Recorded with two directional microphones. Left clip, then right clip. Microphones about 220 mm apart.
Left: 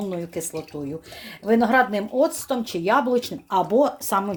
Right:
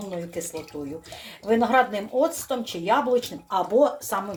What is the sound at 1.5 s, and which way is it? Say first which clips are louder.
Speech: left 2 dB; 45° left (ahead or behind).